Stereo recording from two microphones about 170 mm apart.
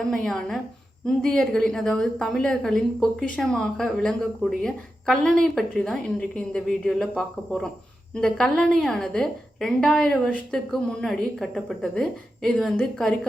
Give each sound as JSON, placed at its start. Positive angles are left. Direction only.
{"t": 0.0, "sound": "a woman's voice", "side_deg": 5}